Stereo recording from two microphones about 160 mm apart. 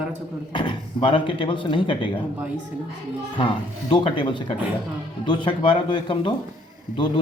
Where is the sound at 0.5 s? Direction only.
30° left (ahead or behind).